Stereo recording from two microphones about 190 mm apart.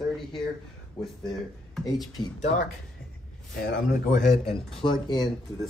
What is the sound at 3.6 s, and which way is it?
Speech, 65° left (ahead or behind).